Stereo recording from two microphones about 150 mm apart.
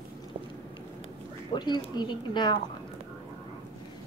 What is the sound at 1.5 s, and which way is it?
A woman's voice, 30° left (ahead or behind).